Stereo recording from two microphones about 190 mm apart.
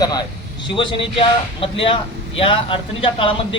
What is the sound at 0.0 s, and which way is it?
A man's voice, 20° left (ahead or behind).